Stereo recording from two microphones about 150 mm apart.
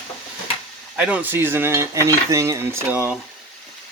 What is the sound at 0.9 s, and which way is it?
Cutlery, 10° right (ahead or behind).